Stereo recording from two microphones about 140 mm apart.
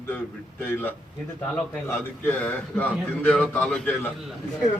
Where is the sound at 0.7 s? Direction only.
15° left (ahead or behind).